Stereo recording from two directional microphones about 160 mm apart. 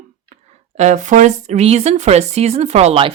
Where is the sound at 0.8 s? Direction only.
50° right (ahead or behind).